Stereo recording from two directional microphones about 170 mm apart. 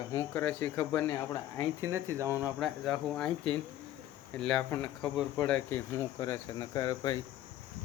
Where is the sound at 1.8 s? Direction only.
15° right (ahead or behind).